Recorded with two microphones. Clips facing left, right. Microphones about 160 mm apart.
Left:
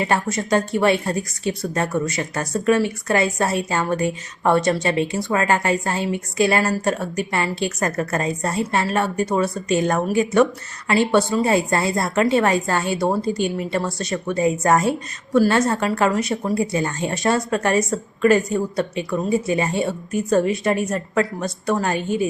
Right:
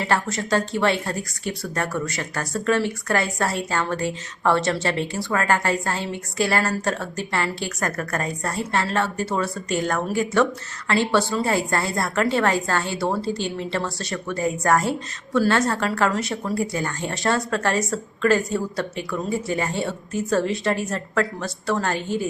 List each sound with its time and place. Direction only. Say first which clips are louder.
0.0 s a woman's voice: left 2 dB; 20° left (ahead or behind)
20.9 s a woman's voice: left 3 dB; 15° left (ahead or behind)